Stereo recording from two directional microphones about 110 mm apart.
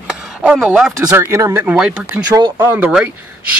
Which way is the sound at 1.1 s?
25° right (ahead or behind).